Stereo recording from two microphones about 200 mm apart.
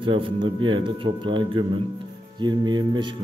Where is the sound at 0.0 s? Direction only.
25° right (ahead or behind).